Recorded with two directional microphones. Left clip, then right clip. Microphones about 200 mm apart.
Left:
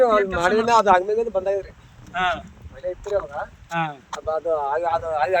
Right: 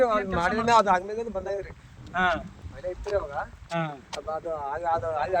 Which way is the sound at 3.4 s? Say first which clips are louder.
Left 3 dB; 45° left (ahead or behind).